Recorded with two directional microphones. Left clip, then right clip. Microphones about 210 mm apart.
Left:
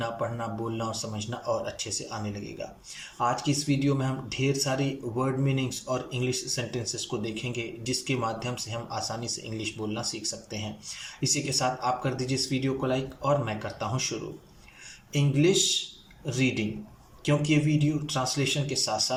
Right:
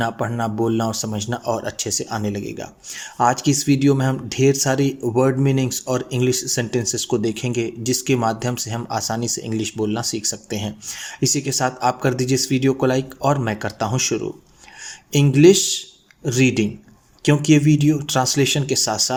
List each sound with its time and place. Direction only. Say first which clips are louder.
0.0 s speech: right 9 dB; 40° right (ahead or behind)